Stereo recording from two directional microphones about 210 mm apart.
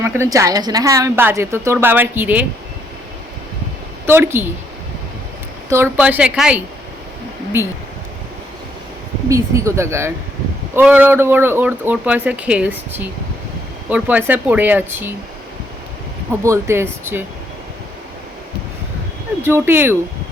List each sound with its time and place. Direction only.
0.0 s a woman's voice: 15° right (ahead or behind)
4.0 s a woman's voice: 10° right (ahead or behind)
5.7 s a woman's voice: 10° right (ahead or behind)
9.3 s a woman's voice: 15° right (ahead or behind)
16.4 s a woman's voice: 15° right (ahead or behind)
19.4 s a woman's voice: 10° right (ahead or behind)